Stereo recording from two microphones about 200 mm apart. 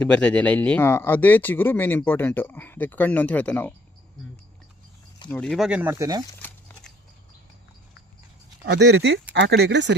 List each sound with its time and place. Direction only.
0.0 s speech: 5° left (ahead or behind)
5.3 s speech: 5° left (ahead or behind); by 6.2 s 15° right (ahead or behind)
8.6 s speech: 60° right (ahead or behind)